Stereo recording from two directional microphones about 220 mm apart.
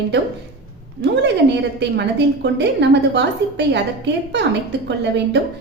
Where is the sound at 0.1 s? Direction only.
50° right (ahead or behind).